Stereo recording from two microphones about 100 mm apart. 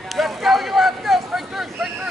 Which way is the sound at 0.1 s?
Centre (ahead or behind).